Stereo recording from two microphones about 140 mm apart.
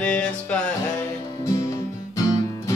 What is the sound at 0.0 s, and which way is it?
Music, 10° left (ahead or behind).